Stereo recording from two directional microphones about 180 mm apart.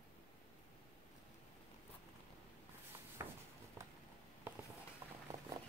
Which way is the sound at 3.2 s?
15° right (ahead or behind).